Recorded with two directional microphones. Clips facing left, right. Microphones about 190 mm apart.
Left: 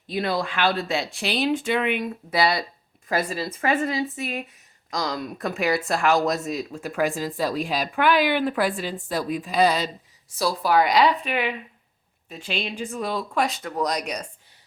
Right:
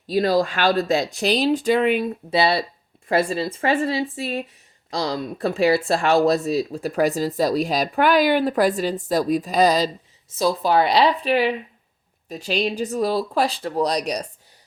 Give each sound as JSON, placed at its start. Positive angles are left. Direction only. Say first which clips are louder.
{"t": 0.1, "sound": "speech", "louder": "right 7 dB", "side_deg": -40}
{"t": 10.2, "sound": "speech", "louder": "right 3 dB", "side_deg": -20}